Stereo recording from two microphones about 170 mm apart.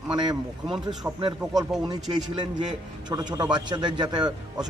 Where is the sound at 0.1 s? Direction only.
25° right (ahead or behind).